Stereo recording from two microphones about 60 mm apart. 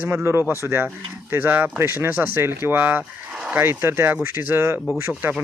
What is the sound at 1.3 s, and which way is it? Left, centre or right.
Speech, right.